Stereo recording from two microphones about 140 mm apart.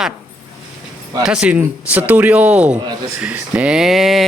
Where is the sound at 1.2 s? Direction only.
5° right (ahead or behind).